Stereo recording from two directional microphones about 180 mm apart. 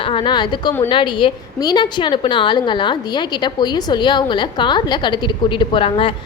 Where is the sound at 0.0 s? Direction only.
30° left (ahead or behind).